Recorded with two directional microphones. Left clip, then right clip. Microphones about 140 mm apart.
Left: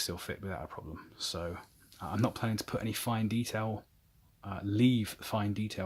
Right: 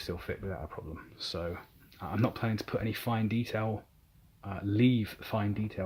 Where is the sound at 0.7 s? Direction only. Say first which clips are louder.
Right 2 dB; 25° left (ahead or behind).